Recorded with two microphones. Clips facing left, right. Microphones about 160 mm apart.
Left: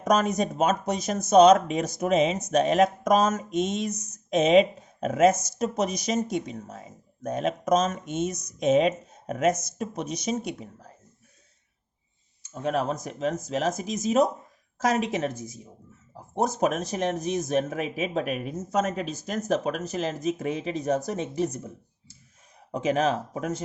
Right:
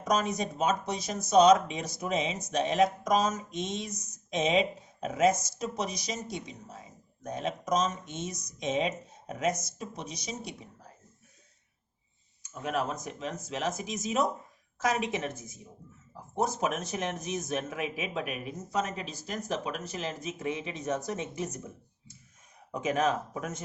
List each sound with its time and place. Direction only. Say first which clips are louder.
0.0 s speech: left 6 dB; 50° left (ahead or behind)
12.4 s speech: left 5 dB; 35° left (ahead or behind)
16.1 s a sound: left 4 dB; 30° left (ahead or behind)
16.5 s speech: left 6 dB; 40° left (ahead or behind)
22.7 s speech: left 4 dB; 30° left (ahead or behind)